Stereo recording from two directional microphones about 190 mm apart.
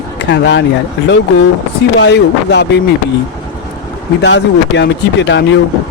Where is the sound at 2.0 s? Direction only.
65° left (ahead or behind).